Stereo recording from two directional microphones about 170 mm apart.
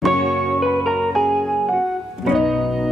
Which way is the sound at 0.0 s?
Centre (ahead or behind).